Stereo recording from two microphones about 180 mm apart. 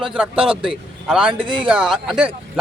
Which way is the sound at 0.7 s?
5° right (ahead or behind).